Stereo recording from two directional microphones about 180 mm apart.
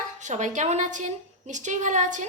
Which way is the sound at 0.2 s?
40° right (ahead or behind).